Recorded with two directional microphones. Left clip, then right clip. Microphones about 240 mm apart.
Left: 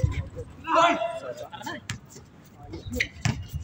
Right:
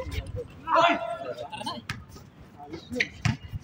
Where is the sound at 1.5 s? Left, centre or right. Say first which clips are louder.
Right 1 dB; right.